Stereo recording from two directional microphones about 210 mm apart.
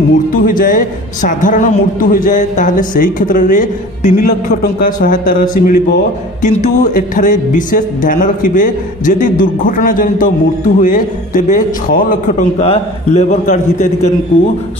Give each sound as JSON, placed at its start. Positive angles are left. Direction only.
{"t": 0.3, "sound": "a woman's voice", "side_deg": 40}